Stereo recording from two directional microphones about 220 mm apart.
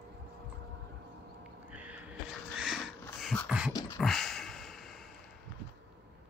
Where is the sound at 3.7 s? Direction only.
15° left (ahead or behind).